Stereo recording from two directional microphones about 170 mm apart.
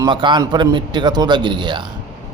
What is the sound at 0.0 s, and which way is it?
Speech, 25° right (ahead or behind).